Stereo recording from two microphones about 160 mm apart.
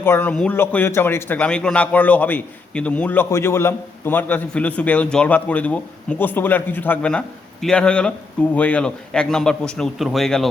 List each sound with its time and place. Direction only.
0.0 s speech: 10° left (ahead or behind)